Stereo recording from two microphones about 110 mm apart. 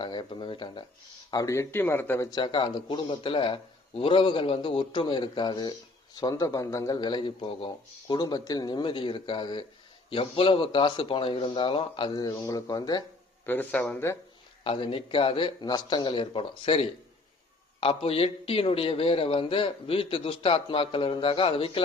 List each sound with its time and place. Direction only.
0.0 s speech: 45° left (ahead or behind)
1.3 s speech: 30° left (ahead or behind)
2.3 s a man's voice: 45° left (ahead or behind)
10.1 s a man's voice: 55° left (ahead or behind); by 13.1 s 35° left (ahead or behind)
13.4 s a man's voice: 15° left (ahead or behind)
14.6 s a man's voice: 55° left (ahead or behind)